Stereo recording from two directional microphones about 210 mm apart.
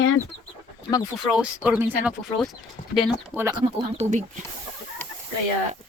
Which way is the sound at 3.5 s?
30° right (ahead or behind).